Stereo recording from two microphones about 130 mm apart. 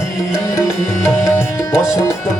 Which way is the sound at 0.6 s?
20° left (ahead or behind).